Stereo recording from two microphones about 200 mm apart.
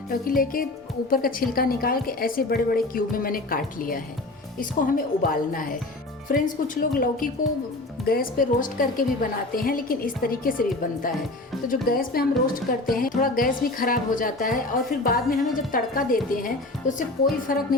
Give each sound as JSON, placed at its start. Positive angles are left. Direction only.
{"t": 0.1, "sound": "a woman's voice", "side_deg": 45}
{"t": 17.5, "sound": "a woman's voice", "side_deg": 45}